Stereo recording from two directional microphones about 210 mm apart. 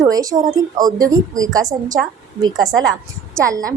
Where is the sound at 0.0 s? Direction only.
15° right (ahead or behind).